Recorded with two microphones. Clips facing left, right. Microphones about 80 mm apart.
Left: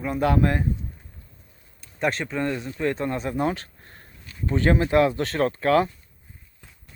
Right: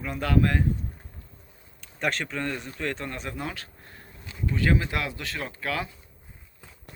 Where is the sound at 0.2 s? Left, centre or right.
Left.